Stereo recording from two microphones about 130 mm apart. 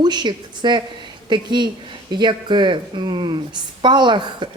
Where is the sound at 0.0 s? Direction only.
35° right (ahead or behind).